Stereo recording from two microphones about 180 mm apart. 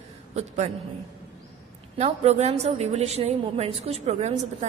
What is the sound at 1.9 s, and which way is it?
A woman's voice, 35° right (ahead or behind).